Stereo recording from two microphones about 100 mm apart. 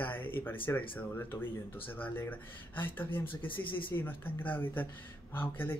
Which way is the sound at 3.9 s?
20° left (ahead or behind).